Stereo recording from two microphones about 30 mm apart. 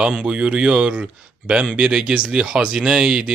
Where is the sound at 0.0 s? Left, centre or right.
Right.